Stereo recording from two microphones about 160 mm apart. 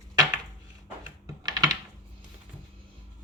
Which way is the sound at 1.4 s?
25° right (ahead or behind).